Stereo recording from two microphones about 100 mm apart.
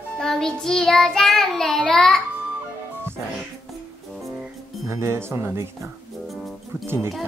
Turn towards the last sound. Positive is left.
turn(degrees=-25)  # may be behind; listen again after turning